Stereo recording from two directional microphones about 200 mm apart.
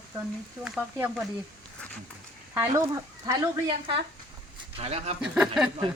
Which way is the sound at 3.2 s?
20° right (ahead or behind).